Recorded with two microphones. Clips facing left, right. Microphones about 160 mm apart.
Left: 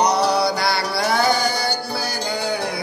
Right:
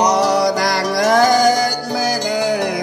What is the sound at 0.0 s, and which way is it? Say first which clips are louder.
Music: right 3 dB; 90° right.